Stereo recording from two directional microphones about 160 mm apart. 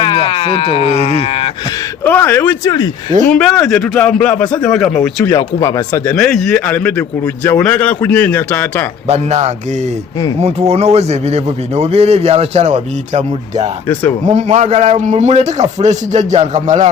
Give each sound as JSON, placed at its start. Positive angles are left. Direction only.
{"t": 0.3, "sound": "speech", "side_deg": 30}
{"t": 2.0, "sound": "a man's voice", "side_deg": 10}
{"t": 2.6, "sound": "speech", "side_deg": 25}
{"t": 3.2, "sound": "a man's voice", "side_deg": 5}
{"t": 5.3, "sound": "speech", "side_deg": 25}
{"t": 6.1, "sound": "a man's voice", "side_deg": 5}
{"t": 9.0, "sound": "a man's voice", "side_deg": -45}
{"t": 10.7, "sound": "a man's voice", "side_deg": -40}